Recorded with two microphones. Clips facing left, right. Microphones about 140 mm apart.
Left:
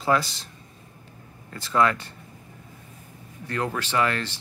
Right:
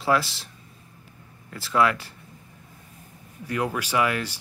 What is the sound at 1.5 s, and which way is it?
Speech, 5° right (ahead or behind).